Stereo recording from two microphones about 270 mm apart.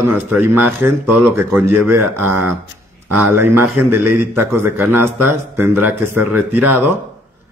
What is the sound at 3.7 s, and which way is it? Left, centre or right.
Speech, right.